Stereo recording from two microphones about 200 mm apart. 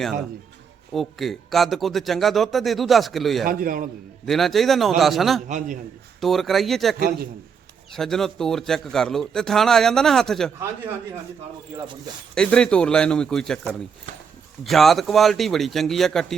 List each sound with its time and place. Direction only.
0.9 s a man's voice: centre (ahead or behind)
3.4 s a man's voice: 45° right (ahead or behind)
4.3 s a man's voice: centre (ahead or behind)
5.5 s a man's voice: 40° right (ahead or behind)
6.1 s a man's voice: centre (ahead or behind)
7.9 s a man's voice: centre (ahead or behind)
12.3 s a man's voice: 5° left (ahead or behind)